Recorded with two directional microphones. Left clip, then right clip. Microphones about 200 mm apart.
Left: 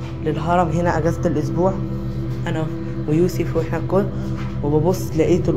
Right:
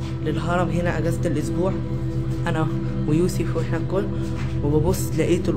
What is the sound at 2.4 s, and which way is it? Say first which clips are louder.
Music: even; 20° right (ahead or behind).